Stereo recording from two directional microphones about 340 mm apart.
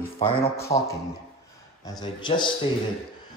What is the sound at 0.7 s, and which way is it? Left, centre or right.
Speech, centre.